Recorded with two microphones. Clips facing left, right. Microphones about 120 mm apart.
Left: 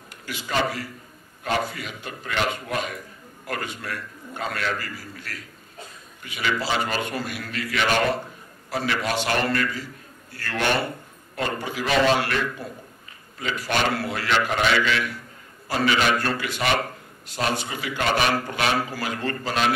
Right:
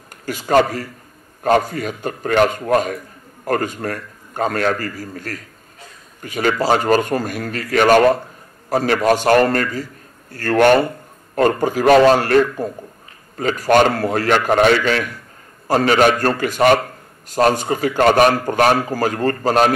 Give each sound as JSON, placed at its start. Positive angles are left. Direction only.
{"t": 0.2, "sound": "a man's voice", "side_deg": -45}